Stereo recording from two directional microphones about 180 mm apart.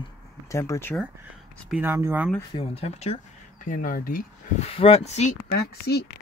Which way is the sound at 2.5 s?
30° left (ahead or behind).